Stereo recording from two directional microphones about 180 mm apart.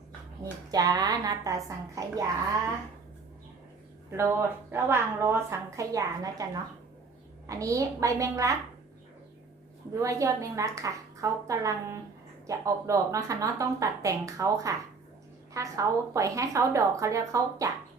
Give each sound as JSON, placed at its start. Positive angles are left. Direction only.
{"t": 0.7, "sound": "a woman's voice", "side_deg": -20}
{"t": 4.1, "sound": "a woman's voice", "side_deg": -15}
{"t": 9.9, "sound": "a woman's voice", "side_deg": -15}